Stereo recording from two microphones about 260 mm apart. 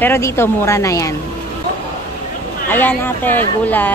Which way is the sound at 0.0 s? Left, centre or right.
Centre.